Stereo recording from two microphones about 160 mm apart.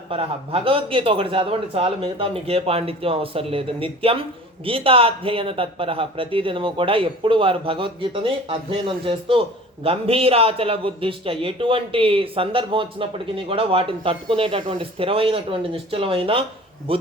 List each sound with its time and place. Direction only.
0.1 s a man's voice: 35° right (ahead or behind)